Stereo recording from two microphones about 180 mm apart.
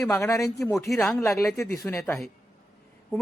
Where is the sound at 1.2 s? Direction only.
15° left (ahead or behind).